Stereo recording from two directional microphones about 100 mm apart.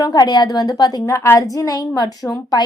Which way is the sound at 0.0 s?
40° left (ahead or behind).